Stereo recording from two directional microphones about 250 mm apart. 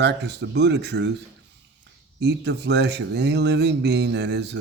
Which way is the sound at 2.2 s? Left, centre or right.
Right.